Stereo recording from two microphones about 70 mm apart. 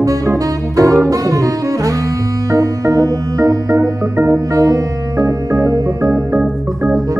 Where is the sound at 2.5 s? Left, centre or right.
Right.